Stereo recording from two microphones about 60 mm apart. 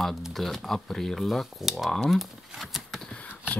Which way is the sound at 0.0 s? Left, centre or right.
Centre.